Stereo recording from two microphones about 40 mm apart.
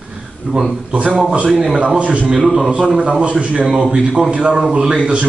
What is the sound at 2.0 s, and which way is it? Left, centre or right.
A man's voice, right.